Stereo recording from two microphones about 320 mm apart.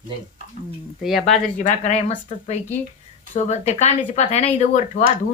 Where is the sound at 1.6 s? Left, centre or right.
Left.